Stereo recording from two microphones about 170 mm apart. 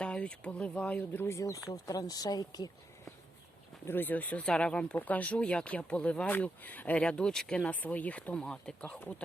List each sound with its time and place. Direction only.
0.0 s speech: 5° left (ahead or behind); by 2.6 s 20° left (ahead or behind)
3.8 s speech: 10° left (ahead or behind)